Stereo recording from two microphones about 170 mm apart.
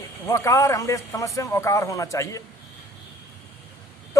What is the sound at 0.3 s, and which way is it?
A man's voice, 15° left (ahead or behind).